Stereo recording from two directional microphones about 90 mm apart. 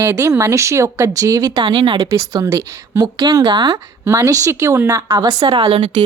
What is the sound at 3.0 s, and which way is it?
Speech, 50° right (ahead or behind).